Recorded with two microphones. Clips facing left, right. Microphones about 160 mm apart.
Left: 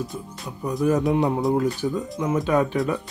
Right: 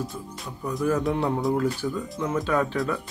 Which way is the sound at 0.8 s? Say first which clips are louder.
Left 4 dB; 15° left (ahead or behind).